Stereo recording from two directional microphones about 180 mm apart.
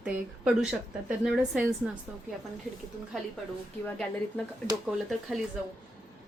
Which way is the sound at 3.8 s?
5° left (ahead or behind).